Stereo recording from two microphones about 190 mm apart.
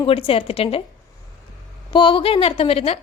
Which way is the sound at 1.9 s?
25° left (ahead or behind).